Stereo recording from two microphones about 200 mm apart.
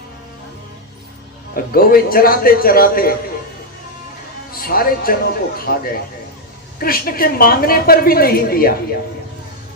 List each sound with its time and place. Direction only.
1.7 s a woman's voice: 45° left (ahead or behind)
4.5 s a woman's voice: 45° left (ahead or behind)